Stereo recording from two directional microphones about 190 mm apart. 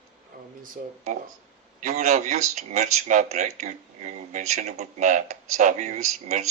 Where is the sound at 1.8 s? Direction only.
40° right (ahead or behind).